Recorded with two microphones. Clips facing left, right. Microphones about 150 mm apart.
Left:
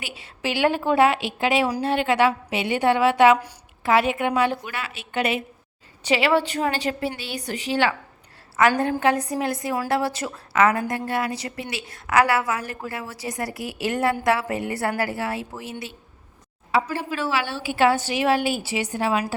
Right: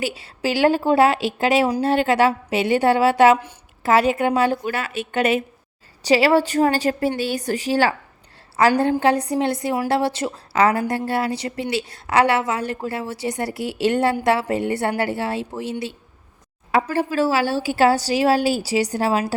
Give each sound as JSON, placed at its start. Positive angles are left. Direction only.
{"t": 0.0, "sound": "a woman's voice", "side_deg": -40}
{"t": 16.7, "sound": "a woman's voice", "side_deg": -50}